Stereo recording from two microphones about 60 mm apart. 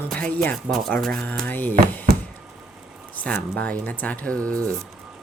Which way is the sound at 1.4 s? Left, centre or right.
Left.